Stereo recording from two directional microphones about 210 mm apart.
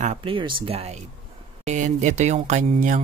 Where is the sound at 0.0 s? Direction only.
30° right (ahead or behind).